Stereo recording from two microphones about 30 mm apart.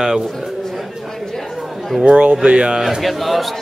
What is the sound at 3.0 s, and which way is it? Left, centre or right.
Speech, centre.